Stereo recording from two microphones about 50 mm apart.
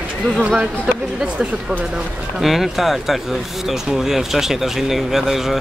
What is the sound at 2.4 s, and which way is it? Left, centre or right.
Speech, centre.